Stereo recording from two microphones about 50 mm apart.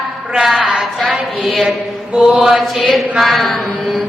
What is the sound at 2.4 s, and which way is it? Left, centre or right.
Mantra, centre.